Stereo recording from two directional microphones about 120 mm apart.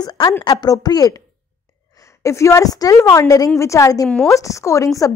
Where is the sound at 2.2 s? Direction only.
25° left (ahead or behind).